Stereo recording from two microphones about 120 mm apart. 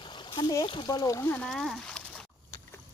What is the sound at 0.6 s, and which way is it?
Speech, 40° left (ahead or behind).